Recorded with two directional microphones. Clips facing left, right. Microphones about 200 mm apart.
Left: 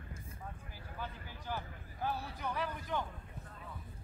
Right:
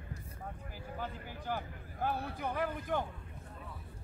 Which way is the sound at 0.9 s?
50° right (ahead or behind).